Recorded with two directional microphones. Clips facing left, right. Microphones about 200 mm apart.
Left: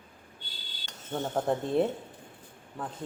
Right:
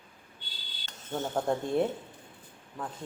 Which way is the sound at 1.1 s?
Centre (ahead or behind).